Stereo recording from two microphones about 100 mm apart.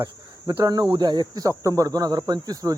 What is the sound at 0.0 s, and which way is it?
Speech, 35° right (ahead or behind).